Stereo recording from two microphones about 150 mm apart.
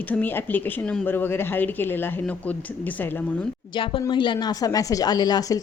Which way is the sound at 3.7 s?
35° left (ahead or behind).